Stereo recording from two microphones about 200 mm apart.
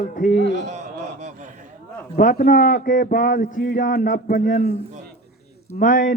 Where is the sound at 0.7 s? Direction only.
40° right (ahead or behind).